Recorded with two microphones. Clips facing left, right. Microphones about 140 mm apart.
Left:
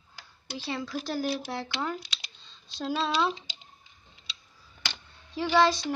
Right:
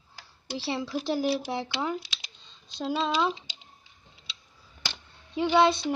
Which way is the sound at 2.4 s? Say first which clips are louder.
Right 2 dB; 15° right (ahead or behind).